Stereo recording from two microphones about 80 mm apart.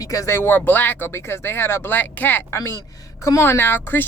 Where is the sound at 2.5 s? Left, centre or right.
Left.